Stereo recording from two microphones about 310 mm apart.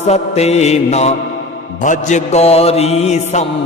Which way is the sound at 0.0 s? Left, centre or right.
Left.